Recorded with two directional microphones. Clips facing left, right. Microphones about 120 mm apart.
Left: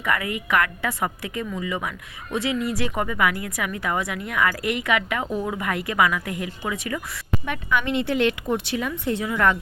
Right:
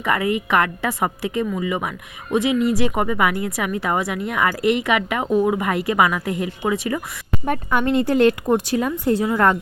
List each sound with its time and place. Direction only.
0.0 s speech: 25° right (ahead or behind)
7.4 s a woman's voice: 45° right (ahead or behind)